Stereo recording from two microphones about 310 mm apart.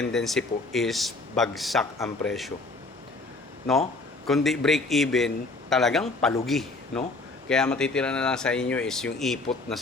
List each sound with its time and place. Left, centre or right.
0.0 s a man's voice: centre
4.3 s a man's voice: centre